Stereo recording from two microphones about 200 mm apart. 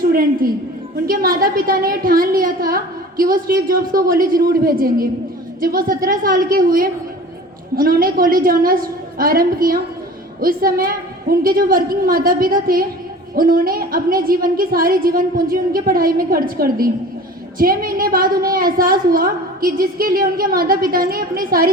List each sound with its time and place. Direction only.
0.0 s a woman's voice: 50° right (ahead or behind)